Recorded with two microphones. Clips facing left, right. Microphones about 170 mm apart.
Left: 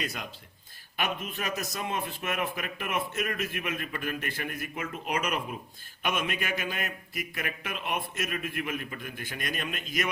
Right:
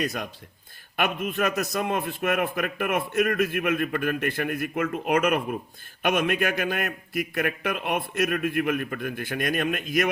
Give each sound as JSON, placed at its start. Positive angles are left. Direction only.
{"t": 0.0, "sound": "a man's voice", "side_deg": -55}